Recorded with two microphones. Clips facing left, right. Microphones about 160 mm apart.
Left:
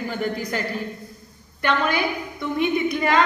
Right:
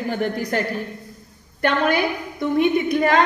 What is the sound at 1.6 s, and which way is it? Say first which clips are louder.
A woman's voice: right 3 dB; 50° right (ahead or behind).